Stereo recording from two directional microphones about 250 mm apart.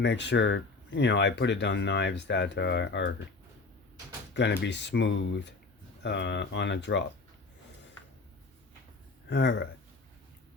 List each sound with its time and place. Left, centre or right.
0.0 s speech: left
4.4 s speech: left
9.3 s speech: left